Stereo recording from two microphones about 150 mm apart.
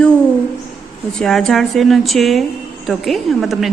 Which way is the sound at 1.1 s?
5° left (ahead or behind).